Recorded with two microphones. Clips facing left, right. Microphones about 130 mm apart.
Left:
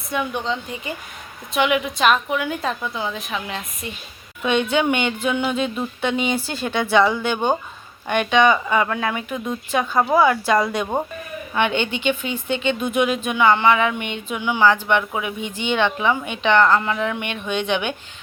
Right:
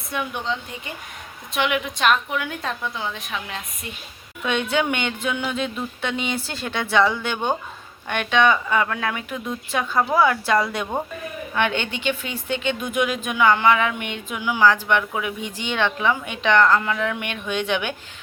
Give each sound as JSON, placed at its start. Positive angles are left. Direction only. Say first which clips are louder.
{"t": 0.1, "sound": "speech", "louder": "left 3 dB", "side_deg": 0}